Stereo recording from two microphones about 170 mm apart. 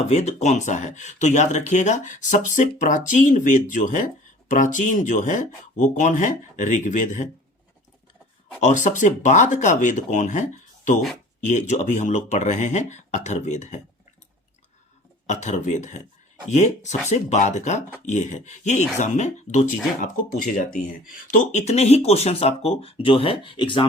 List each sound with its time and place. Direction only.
0.1 s speech: 40° left (ahead or behind)
8.6 s speech: 45° left (ahead or behind)
15.3 s speech: 45° left (ahead or behind)
20.0 s speech: 55° left (ahead or behind); by 23.8 s 30° left (ahead or behind)